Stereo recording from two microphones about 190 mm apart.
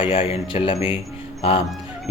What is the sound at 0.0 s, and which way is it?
A man's voice, 30° left (ahead or behind).